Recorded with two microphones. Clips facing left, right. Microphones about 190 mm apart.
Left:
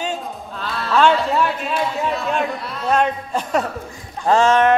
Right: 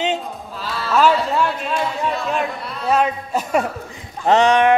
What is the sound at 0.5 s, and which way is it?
Speech, centre (ahead or behind).